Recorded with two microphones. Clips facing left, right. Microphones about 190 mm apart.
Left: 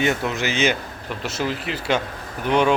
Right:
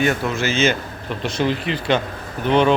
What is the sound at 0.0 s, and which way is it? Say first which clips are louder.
Speech: right 2 dB; 20° left (ahead or behind).